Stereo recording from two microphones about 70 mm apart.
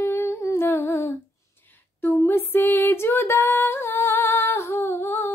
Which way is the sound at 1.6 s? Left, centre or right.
Left.